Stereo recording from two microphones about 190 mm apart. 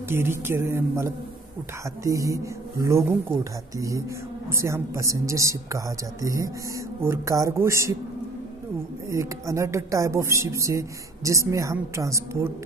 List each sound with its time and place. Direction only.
0.1 s a woman's voice: 10° right (ahead or behind)
4.5 s a woman's voice: 15° right (ahead or behind)
9.1 s a woman's voice: 15° right (ahead or behind)